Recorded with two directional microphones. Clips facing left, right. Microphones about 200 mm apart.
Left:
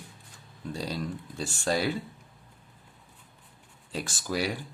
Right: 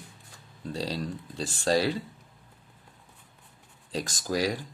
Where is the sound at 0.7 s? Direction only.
35° right (ahead or behind).